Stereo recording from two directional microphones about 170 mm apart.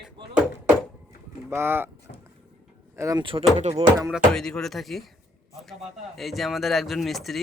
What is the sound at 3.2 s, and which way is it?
Speech, 30° right (ahead or behind).